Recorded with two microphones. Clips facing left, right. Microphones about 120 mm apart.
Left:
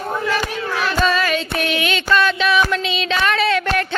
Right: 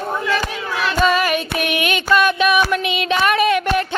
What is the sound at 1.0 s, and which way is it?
Music, 15° right (ahead or behind).